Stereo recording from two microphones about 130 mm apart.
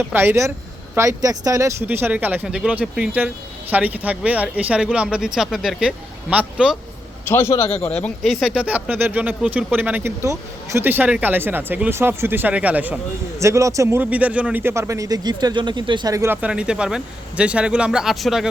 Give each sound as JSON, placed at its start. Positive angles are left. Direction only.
{"t": 0.0, "sound": "speech", "side_deg": -15}
{"t": 7.3, "sound": "a man's voice", "side_deg": 20}
{"t": 8.2, "sound": "speech", "side_deg": 0}
{"t": 13.4, "sound": "speech", "side_deg": -25}
{"t": 16.1, "sound": "speech", "side_deg": -20}